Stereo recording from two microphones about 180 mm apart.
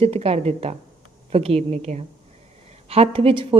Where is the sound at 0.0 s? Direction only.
35° right (ahead or behind).